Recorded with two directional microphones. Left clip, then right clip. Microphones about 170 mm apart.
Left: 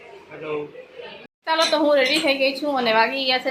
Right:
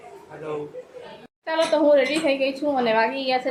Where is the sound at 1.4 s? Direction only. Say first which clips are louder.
Left 1 dB; 10° right (ahead or behind).